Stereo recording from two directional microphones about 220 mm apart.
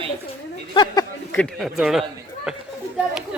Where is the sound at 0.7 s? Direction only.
20° left (ahead or behind).